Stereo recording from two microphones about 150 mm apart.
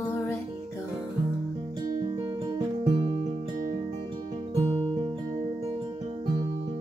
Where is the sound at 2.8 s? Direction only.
40° right (ahead or behind).